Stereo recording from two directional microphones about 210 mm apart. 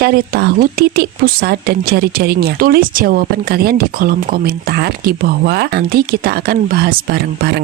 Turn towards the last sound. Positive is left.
turn(degrees=-50)  # may be behind; listen again after turning